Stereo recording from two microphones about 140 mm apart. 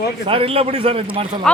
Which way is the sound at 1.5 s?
5° left (ahead or behind).